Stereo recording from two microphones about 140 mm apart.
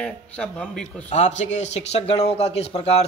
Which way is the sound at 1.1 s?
55° left (ahead or behind).